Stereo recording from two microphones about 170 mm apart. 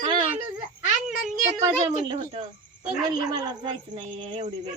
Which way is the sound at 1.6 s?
25° right (ahead or behind).